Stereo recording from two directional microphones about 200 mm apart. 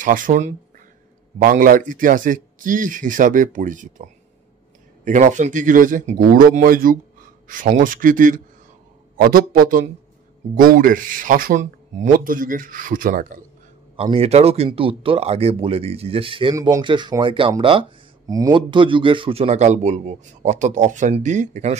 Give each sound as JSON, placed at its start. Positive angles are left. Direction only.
{"t": 0.0, "sound": "speech", "side_deg": -40}
{"t": 5.0, "sound": "speech", "side_deg": -40}
{"t": 13.9, "sound": "speech", "side_deg": -30}